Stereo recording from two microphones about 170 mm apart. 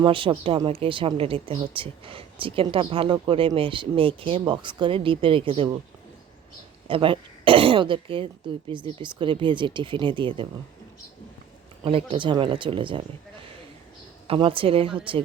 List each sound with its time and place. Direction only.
0.0 s speech: 30° right (ahead or behind)
6.8 s speech: 30° right (ahead or behind)
11.8 s speech: 30° right (ahead or behind)
14.3 s speech: 30° right (ahead or behind)